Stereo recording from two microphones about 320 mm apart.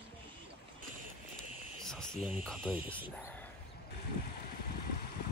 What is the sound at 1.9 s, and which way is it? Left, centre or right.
Cricket, centre.